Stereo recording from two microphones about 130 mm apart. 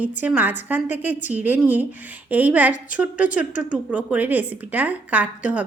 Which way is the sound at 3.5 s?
80° left.